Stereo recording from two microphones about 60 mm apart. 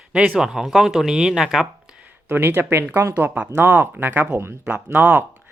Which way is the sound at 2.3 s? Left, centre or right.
Right.